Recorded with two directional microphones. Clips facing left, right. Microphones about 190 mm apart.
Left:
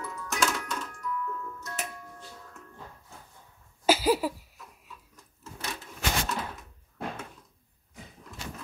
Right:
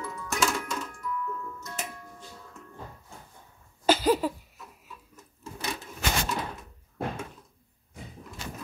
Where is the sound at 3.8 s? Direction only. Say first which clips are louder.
Right 1 dB; 10° left (ahead or behind).